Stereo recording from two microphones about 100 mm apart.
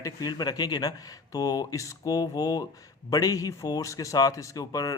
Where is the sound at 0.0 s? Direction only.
40° left (ahead or behind).